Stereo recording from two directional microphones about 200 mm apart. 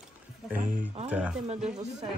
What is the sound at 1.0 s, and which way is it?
Speech, 5° right (ahead or behind).